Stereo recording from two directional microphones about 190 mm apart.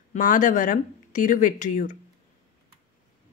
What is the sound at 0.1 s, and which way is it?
Speech, 45° left (ahead or behind).